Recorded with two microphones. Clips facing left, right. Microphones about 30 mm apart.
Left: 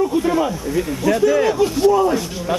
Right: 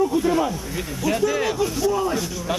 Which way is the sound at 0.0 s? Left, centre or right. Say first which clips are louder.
Left 2 dB; centre.